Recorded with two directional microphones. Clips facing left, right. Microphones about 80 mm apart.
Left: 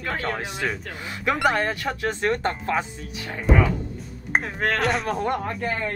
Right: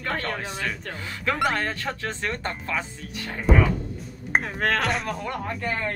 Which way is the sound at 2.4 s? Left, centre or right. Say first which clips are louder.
Left 5 dB; left.